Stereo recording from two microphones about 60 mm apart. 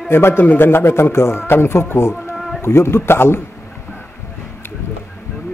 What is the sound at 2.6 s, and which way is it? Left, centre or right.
Speech, left.